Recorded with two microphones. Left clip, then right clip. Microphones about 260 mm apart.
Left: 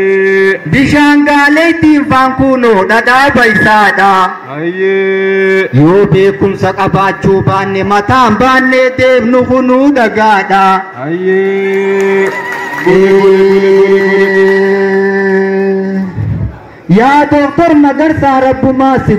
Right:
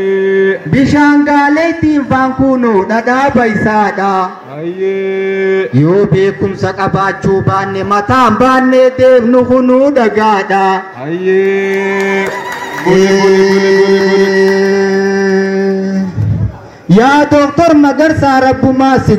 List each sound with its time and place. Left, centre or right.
0.0 s a sound: centre
3.8 s a man's voice: left
8.5 s a sound: left
10.3 s a man's voice: left
11.2 s a sound: centre
12.9 s a man's voice: right
13.4 s music: right
15.5 s guitar: right
16.9 s a man's voice: right